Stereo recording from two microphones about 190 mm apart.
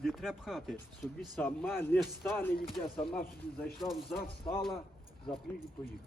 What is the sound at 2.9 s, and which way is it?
Speech, 30° left (ahead or behind).